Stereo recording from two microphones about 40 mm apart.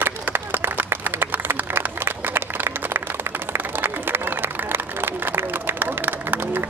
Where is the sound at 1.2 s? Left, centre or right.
Right.